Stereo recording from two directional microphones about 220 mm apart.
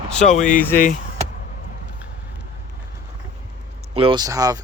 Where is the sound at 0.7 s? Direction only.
40° left (ahead or behind).